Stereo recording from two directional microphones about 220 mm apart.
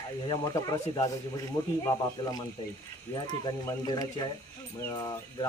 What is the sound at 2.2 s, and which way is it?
Speech, 20° left (ahead or behind).